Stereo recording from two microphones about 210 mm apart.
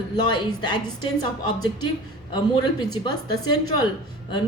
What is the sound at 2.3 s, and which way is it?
Speech, 20° left (ahead or behind).